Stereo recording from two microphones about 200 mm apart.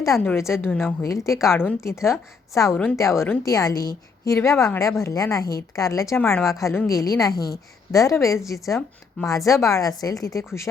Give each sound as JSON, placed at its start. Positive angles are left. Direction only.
{"t": 0.0, "sound": "a woman's voice", "side_deg": 10}
{"t": 7.3, "sound": "a woman's voice", "side_deg": 50}
{"t": 7.9, "sound": "a woman's voice", "side_deg": 15}